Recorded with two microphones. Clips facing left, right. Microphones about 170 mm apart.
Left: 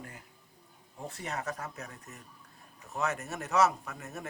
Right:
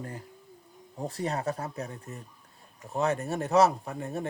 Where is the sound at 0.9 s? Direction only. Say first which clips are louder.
Right 7 dB; 35° right (ahead or behind).